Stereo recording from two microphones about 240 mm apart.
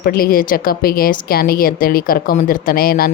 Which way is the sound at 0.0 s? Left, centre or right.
Left.